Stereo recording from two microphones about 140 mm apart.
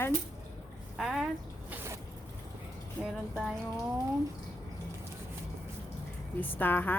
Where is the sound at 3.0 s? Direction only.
5° right (ahead or behind).